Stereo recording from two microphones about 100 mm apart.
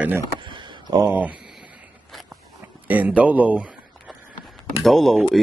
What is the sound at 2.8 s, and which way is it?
Speech, 15° right (ahead or behind).